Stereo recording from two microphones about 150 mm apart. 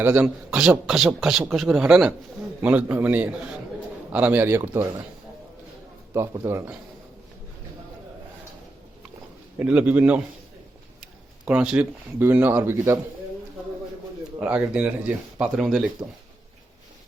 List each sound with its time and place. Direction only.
0.0 s a man's voice: 10° right (ahead or behind)
6.1 s a man's voice: 20° right (ahead or behind)
9.6 s speech: 10° right (ahead or behind)
14.3 s speech: 10° right (ahead or behind)